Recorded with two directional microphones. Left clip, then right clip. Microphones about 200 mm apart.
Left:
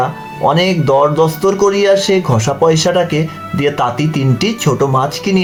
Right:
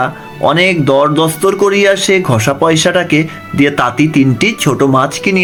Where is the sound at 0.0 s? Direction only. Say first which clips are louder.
Right 1 dB; 30° right (ahead or behind).